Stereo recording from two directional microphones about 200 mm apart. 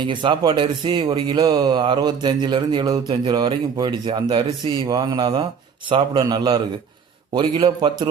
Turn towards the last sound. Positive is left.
turn(degrees=-25)  # may be behind; listen again after turning